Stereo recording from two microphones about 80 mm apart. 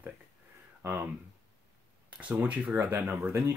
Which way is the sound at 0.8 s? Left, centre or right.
Right.